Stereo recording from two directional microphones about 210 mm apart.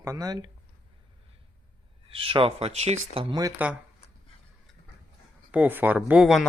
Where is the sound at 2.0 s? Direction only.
25° right (ahead or behind).